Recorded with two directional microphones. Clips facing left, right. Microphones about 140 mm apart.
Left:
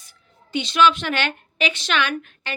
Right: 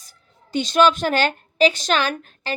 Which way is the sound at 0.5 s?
40° right (ahead or behind).